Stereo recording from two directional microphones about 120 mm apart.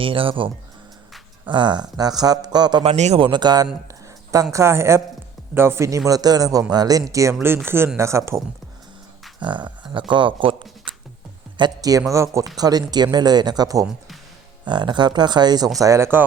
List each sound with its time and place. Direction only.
0.0 s speech: 50° right (ahead or behind)
2.8 s speech: 65° right (ahead or behind)
3.2 s speech: 40° right (ahead or behind)
3.8 s a sound: 30° right (ahead or behind)
4.5 s a man's voice: 25° right (ahead or behind)
9.4 s a man's voice: 40° right (ahead or behind); by 16.0 s 25° right (ahead or behind)